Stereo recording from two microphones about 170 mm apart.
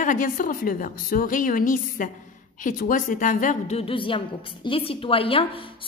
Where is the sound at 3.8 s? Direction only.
30° left (ahead or behind).